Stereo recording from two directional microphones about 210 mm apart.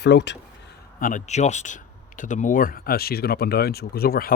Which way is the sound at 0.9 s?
40° left (ahead or behind).